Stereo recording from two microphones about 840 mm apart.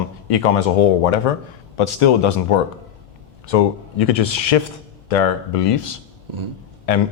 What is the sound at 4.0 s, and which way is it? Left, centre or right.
Speech, left.